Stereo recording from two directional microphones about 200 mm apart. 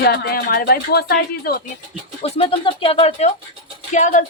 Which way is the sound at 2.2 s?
30° left (ahead or behind).